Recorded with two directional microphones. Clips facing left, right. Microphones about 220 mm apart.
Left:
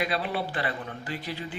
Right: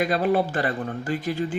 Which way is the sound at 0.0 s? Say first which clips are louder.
Right 8 dB; 45° right (ahead or behind).